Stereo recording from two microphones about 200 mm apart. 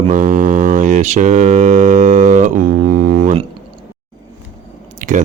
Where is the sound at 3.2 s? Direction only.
30° right (ahead or behind).